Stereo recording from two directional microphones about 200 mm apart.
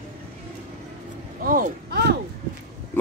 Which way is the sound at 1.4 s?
45° right (ahead or behind).